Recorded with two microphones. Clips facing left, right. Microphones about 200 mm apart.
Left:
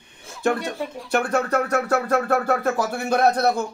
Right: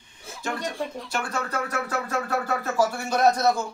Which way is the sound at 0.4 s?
55° left (ahead or behind).